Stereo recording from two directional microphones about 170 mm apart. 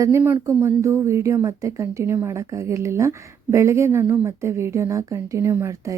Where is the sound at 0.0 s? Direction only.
15° right (ahead or behind).